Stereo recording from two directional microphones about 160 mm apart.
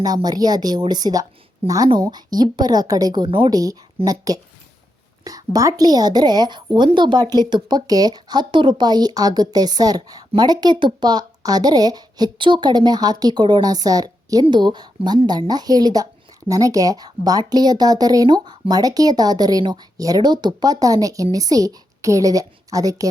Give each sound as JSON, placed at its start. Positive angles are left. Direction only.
{"t": 0.0, "sound": "a woman's voice", "side_deg": -25}